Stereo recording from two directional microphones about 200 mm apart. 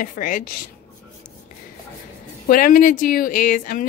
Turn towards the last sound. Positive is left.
turn(degrees=40)  # may be behind; listen again after turning